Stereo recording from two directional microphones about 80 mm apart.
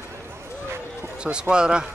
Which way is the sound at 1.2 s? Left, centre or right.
Centre.